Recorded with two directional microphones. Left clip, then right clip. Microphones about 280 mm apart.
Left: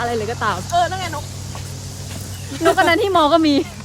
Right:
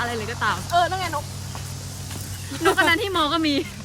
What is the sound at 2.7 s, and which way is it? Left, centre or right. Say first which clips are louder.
Speech: left 7 dB; centre.